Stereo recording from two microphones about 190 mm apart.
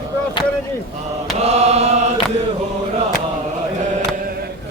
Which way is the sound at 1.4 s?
35° right (ahead or behind).